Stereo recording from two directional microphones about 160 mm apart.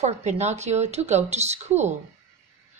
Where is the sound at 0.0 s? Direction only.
45° right (ahead or behind).